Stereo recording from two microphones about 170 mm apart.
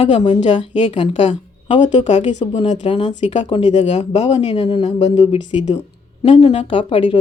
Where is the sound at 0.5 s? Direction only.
45° left (ahead or behind).